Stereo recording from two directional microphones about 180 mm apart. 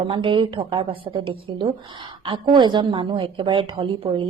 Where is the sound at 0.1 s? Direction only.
30° right (ahead or behind).